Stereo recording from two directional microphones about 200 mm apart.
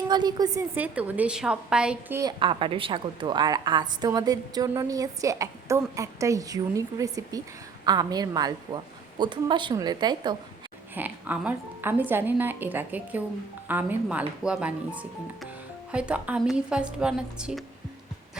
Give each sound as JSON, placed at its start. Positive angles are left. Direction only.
{"t": 0.1, "sound": "a woman's voice", "side_deg": -20}
{"t": 2.4, "sound": "a woman's voice", "side_deg": -25}
{"t": 10.9, "sound": "a woman's voice", "side_deg": -10}
{"t": 15.9, "sound": "a woman's voice", "side_deg": -5}